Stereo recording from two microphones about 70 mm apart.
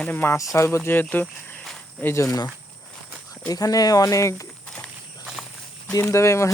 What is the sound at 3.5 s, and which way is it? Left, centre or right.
Speech, left.